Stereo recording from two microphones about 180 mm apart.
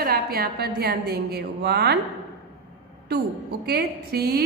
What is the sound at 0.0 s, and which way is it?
A woman's voice, 60° right (ahead or behind).